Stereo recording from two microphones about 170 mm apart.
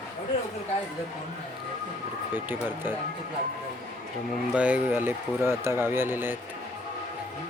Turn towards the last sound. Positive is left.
turn(degrees=-10)  # may be behind; listen again after turning